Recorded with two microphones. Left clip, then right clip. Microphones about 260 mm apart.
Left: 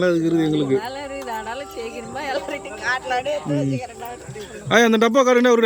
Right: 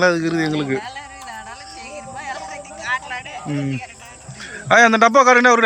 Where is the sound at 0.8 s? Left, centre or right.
Left.